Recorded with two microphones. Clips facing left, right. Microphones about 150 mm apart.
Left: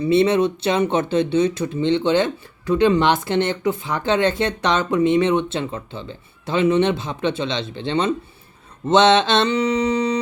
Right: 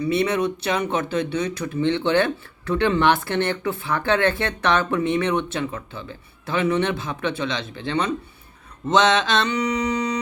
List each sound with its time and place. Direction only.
0.0 s speech: 25° left (ahead or behind)